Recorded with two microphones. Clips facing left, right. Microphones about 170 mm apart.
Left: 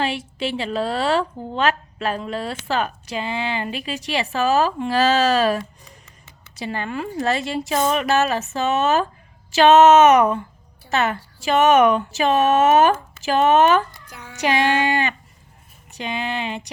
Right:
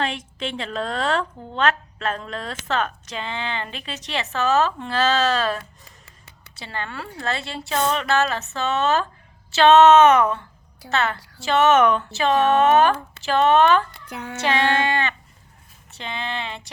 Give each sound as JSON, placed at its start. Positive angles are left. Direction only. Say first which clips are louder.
{"t": 0.0, "sound": "a woman's voice", "louder": "left 3 dB", "side_deg": 5}
{"t": 14.1, "sound": "child singing", "louder": "right 8 dB", "side_deg": -60}
{"t": 14.4, "sound": "a woman's voice", "louder": "left 2 dB", "side_deg": 15}